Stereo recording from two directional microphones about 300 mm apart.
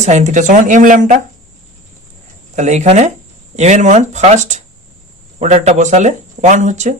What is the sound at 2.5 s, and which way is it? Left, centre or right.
Speech, right.